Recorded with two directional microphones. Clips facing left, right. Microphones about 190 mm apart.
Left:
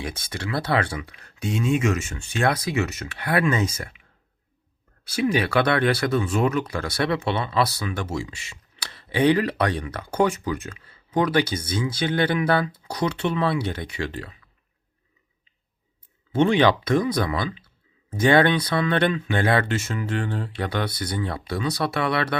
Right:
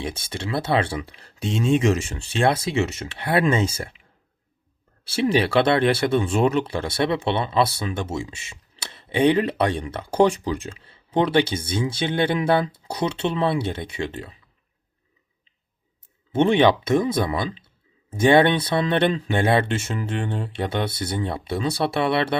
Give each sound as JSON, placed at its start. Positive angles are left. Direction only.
{"t": 0.0, "sound": "speech", "side_deg": -25}
{"t": 5.0, "sound": "speech", "side_deg": -30}
{"t": 16.3, "sound": "speech", "side_deg": -25}